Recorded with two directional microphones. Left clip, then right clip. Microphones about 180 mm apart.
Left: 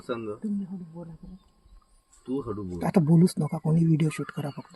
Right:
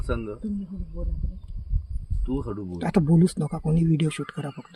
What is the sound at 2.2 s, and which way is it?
Speech, 55° right (ahead or behind).